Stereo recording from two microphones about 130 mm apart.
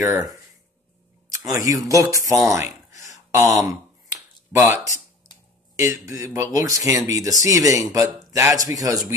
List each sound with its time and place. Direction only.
0.0 s speech: 25° right (ahead or behind)
1.5 s speech: 25° right (ahead or behind)
2.5 s a sound: 25° right (ahead or behind)
4.5 s speech: 20° right (ahead or behind)